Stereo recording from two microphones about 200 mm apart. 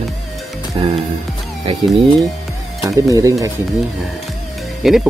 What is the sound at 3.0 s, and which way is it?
Speech, 15° right (ahead or behind).